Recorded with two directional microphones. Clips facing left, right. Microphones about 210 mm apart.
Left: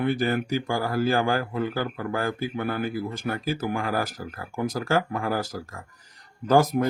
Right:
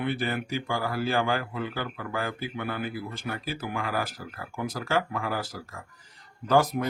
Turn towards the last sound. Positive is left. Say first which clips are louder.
# left 3 dB
turn(degrees=45)  # may be behind; listen again after turning